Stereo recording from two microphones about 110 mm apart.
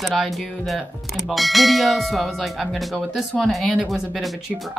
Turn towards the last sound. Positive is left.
turn(degrees=0)  # may be behind; listen again after turning